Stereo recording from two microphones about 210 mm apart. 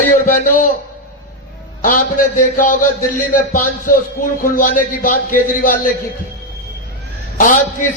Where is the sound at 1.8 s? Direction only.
40° left (ahead or behind).